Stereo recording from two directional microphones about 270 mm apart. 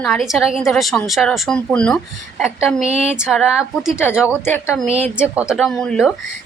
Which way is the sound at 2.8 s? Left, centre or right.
Right.